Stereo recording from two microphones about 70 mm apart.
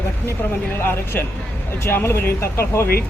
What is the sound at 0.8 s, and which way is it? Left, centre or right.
Speech, left.